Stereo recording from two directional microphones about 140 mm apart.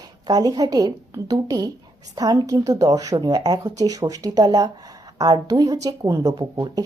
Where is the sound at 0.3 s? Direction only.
25° right (ahead or behind).